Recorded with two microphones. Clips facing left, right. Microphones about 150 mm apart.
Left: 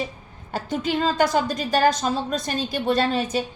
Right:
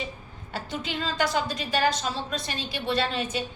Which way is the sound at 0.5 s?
45° left (ahead or behind).